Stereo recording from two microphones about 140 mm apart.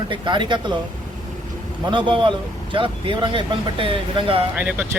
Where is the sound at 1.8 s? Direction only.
35° right (ahead or behind).